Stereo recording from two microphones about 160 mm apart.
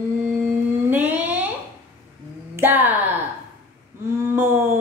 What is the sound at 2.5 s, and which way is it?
Speech, 10° right (ahead or behind).